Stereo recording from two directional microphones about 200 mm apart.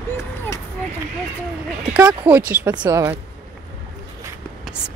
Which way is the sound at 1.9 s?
10° right (ahead or behind).